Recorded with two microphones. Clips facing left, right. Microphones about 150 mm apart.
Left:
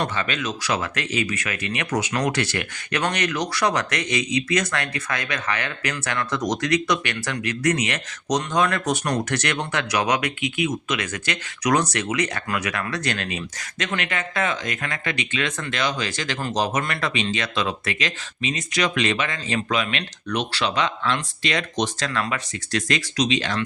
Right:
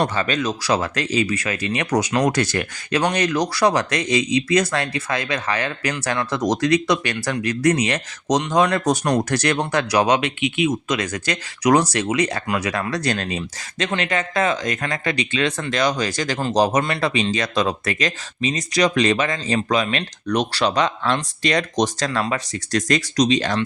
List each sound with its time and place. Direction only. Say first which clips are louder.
0.0 s speech: right 5 dB; 35° right (ahead or behind)